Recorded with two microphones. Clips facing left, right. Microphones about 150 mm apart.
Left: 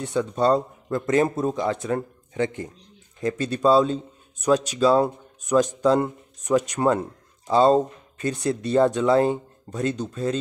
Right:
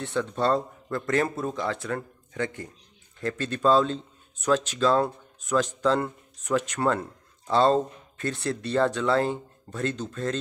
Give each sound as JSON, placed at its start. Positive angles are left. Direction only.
{"t": 0.0, "sound": "a man's voice", "side_deg": 15}